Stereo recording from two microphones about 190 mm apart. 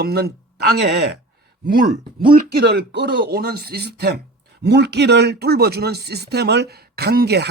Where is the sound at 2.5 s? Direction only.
60° right (ahead or behind).